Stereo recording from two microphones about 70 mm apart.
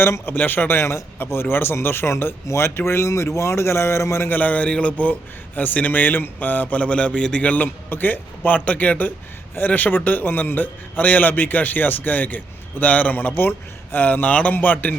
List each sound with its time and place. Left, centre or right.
0.0 s a man's voice: left
4.3 s speech: left